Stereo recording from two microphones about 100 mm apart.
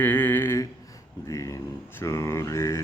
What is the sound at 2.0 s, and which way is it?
Mantra, 30° left (ahead or behind).